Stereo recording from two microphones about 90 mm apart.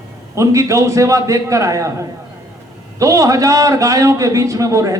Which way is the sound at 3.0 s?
40° right (ahead or behind).